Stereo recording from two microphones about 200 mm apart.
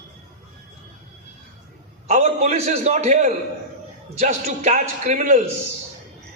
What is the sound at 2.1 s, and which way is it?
A man's voice, 35° right (ahead or behind).